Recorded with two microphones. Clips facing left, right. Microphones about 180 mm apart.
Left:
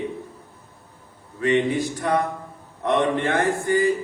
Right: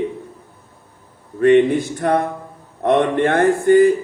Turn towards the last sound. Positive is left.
turn(degrees=-55)  # may be behind; listen again after turning